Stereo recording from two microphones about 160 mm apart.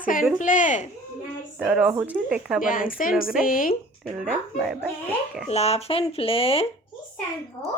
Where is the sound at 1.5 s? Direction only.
5° right (ahead or behind).